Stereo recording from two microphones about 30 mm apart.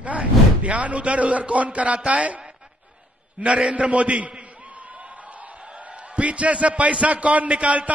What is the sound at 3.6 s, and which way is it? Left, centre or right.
Speech, right.